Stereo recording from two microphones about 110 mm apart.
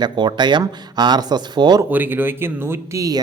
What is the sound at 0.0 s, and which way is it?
Speech, 40° right (ahead or behind).